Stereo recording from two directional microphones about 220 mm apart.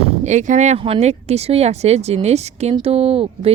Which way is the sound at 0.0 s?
35° right (ahead or behind).